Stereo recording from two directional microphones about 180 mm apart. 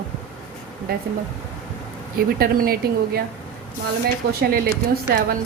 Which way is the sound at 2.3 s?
55° right (ahead or behind).